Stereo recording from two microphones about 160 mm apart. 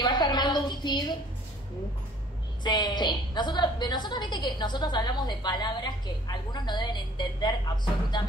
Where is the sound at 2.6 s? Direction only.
25° left (ahead or behind).